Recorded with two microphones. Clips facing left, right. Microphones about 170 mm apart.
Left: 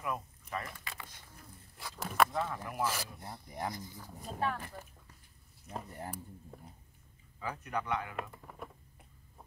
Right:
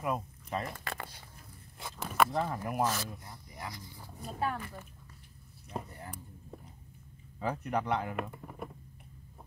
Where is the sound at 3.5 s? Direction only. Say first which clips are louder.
Left 6 dB; 50° left (ahead or behind).